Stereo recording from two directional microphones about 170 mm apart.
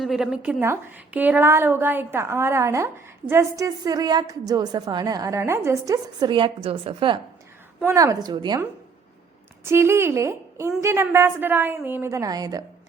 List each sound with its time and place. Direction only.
0.0 s a woman's voice: centre (ahead or behind); by 7.2 s 30° right (ahead or behind)
7.9 s a woman's voice: 20° right (ahead or behind)
9.6 s a woman's voice: 15° right (ahead or behind)